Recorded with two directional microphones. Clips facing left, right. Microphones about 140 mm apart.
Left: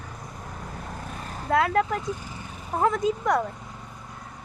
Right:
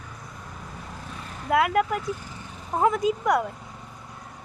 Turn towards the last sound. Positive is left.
turn(degrees=-15)  # may be behind; listen again after turning